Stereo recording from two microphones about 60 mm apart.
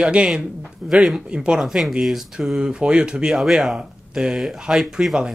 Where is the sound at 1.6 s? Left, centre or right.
Centre.